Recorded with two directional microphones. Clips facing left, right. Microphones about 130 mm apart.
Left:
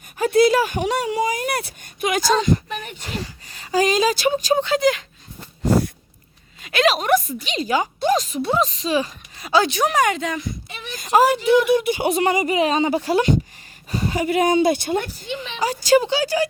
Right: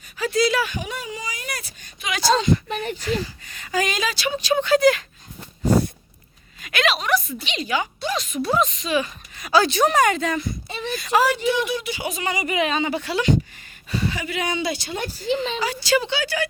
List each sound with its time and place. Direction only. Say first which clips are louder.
0.2 s speech: left 5 dB; 50° left (ahead or behind)
0.8 s speech: left 10 dB; 70° left (ahead or behind); by 2.3 s 50° left (ahead or behind)
2.6 s a woman's voice: right 4 dB; 35° right (ahead or behind)
3.0 s a woman's voice: right 5 dB; 35° left (ahead or behind)
4.6 s a woman's voice: right 2 dB; 20° left (ahead or behind)
6.6 s a woman's voice: left 4 dB; 30° left (ahead or behind)
8.4 s a woman's voice: left 1 dB; 25° left (ahead or behind)
10.9 s a woman's voice: left 4 dB; 40° left (ahead or behind)
12.5 s a woman's voice: left 4 dB; 35° left (ahead or behind)
15.0 s a woman's voice: right 6 dB; 35° right (ahead or behind)
15.6 s a woman's voice: left 11 dB; 45° left (ahead or behind)